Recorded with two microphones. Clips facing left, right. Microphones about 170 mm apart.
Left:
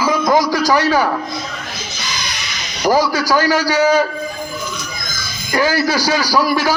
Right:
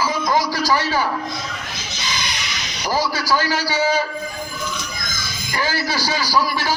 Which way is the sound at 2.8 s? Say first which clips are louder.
Left 7 dB; 45° left (ahead or behind).